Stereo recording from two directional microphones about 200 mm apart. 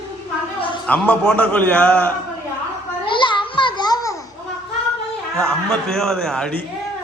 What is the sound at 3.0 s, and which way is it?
Babbling, 25° left (ahead or behind).